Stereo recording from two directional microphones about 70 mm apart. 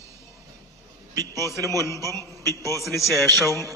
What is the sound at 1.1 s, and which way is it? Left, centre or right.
Speech, right.